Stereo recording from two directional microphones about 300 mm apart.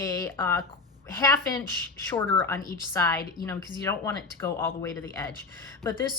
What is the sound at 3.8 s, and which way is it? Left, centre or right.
Speech, centre.